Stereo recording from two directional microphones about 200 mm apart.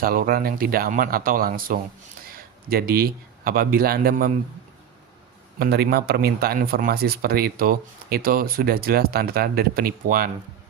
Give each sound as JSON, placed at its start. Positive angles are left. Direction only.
{"t": 0.0, "sound": "speech", "side_deg": -45}
{"t": 5.5, "sound": "speech", "side_deg": -50}